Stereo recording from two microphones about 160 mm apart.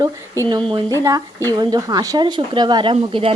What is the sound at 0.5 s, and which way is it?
Speech, 25° right (ahead or behind).